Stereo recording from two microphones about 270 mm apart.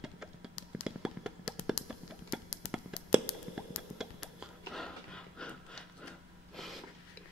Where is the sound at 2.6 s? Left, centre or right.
Left.